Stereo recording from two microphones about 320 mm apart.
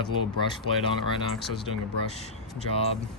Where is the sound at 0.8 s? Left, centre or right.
Centre.